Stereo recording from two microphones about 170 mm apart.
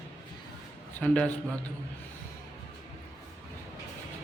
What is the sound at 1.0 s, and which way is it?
Speech, 10° left (ahead or behind).